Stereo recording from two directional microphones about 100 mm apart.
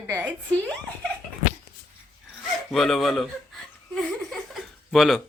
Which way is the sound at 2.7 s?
Centre (ahead or behind).